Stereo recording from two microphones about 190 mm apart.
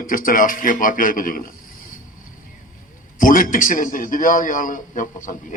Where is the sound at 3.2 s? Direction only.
45° left (ahead or behind).